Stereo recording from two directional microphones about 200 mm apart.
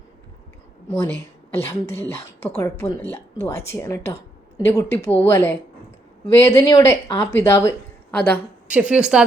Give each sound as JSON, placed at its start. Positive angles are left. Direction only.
{"t": 0.9, "sound": "a woman's voice", "side_deg": 10}
{"t": 8.7, "sound": "a woman's voice", "side_deg": -5}